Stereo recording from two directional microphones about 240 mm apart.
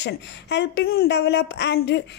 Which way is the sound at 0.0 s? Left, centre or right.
Left.